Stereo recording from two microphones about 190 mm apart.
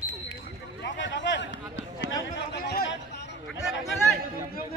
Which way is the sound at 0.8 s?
70° left (ahead or behind).